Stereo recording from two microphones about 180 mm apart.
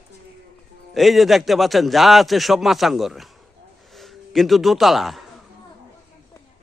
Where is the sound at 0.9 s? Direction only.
Centre (ahead or behind).